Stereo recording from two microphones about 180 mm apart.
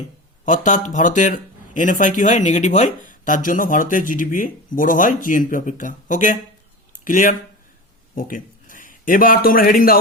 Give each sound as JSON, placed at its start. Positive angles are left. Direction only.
{"t": 0.4, "sound": "a man's voice", "side_deg": 45}